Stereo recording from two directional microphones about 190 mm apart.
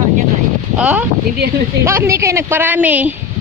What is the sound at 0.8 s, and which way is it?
Speech, 5° right (ahead or behind).